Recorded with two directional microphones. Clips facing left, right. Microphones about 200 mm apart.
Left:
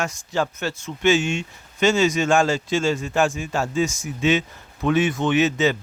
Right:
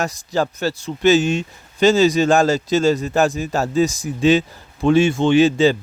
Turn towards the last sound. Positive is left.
turn(degrees=-30)  # may be behind; listen again after turning